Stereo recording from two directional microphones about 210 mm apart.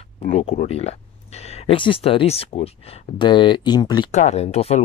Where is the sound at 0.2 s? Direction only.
30° left (ahead or behind).